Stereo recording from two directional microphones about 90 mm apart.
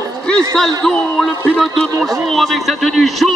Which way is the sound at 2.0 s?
Centre (ahead or behind).